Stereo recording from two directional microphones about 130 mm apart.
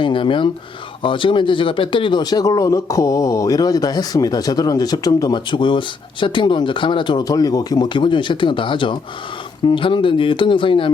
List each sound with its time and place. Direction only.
0.0 s speech: 40° left (ahead or behind)